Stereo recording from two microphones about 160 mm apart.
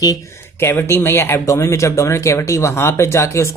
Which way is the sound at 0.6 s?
15° left (ahead or behind).